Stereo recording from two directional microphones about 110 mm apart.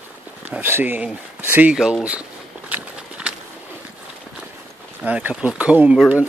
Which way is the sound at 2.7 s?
10° right (ahead or behind).